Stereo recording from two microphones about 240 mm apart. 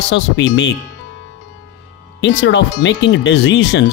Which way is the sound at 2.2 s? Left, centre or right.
Left.